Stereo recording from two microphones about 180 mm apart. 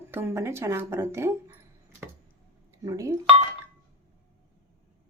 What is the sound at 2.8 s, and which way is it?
Speech, 15° right (ahead or behind).